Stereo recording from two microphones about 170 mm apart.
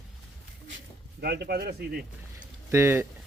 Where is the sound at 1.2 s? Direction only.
70° right (ahead or behind).